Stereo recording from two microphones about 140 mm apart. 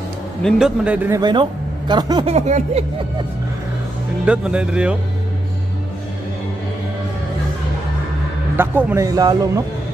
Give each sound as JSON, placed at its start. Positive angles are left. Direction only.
{"t": 0.4, "sound": "a man's voice", "side_deg": 0}
{"t": 1.2, "sound": "speech", "side_deg": -35}
{"t": 2.2, "sound": "a sound", "side_deg": -55}
{"t": 4.3, "sound": "a man's voice", "side_deg": -10}
{"t": 8.5, "sound": "speech", "side_deg": -15}